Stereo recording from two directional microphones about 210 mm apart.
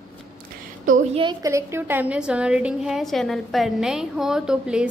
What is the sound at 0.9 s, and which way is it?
Speech, 35° right (ahead or behind).